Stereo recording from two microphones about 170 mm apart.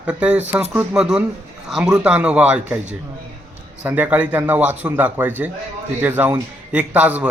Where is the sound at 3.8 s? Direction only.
10° right (ahead or behind).